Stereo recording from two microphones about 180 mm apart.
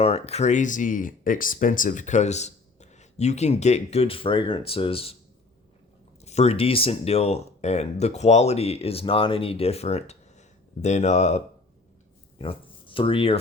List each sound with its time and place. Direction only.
0.0 s speech: 35° left (ahead or behind)
6.2 s speech: 35° left (ahead or behind)